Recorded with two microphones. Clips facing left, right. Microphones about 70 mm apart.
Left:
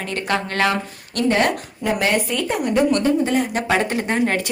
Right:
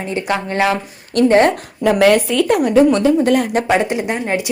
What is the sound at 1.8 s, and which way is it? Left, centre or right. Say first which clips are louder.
Speech: right 9 dB; right.